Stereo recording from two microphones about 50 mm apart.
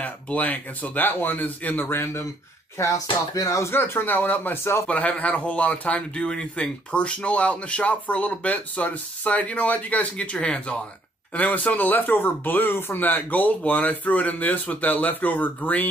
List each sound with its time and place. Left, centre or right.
0.0 s speech: left
1.9 s speech: left
2.8 s speech: left
3.7 s speech: left
4.1 s speech: left